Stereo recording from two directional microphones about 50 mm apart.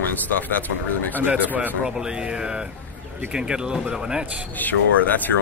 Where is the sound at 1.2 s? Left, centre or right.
Right.